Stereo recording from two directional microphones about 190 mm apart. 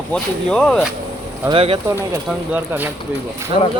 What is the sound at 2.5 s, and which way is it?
Speech, 10° right (ahead or behind).